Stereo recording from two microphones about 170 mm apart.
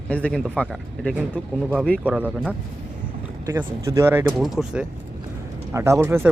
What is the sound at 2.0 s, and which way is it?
Speech, 10° right (ahead or behind).